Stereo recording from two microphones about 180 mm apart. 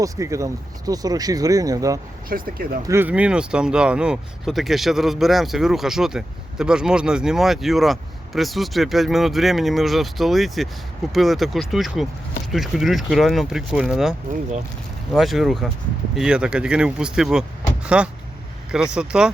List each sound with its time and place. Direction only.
0.0 s speech: 15° right (ahead or behind)
2.3 s speech: 50° right (ahead or behind)
2.8 s speech: 15° right (ahead or behind)